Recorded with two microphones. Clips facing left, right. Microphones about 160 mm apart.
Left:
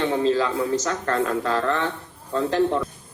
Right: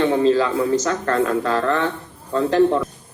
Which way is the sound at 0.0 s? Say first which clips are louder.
Right 4 dB; 75° right (ahead or behind).